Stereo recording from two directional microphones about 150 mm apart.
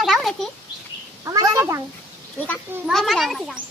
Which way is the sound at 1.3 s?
20° right (ahead or behind).